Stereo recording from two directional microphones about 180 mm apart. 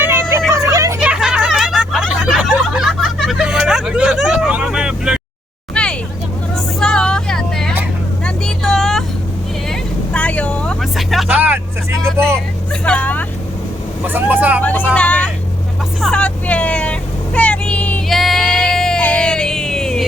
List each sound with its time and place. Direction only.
0.1 s a sound: 15° right (ahead or behind)
0.9 s a sound: 5° right (ahead or behind)
5.7 s vehicle: 5° left (ahead or behind); by 12.3 s 15° right (ahead or behind)
12.8 s vehicle: 10° left (ahead or behind)
14.1 s vehicle: 10° right (ahead or behind)
14.6 s vehicle: 10° left (ahead or behind)